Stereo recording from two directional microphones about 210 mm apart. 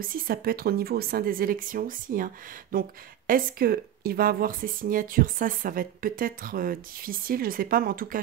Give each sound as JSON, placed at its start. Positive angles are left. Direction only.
{"t": 0.0, "sound": "speech", "side_deg": -45}